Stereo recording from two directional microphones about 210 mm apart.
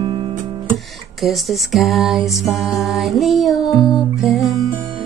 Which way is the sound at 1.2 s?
Centre (ahead or behind).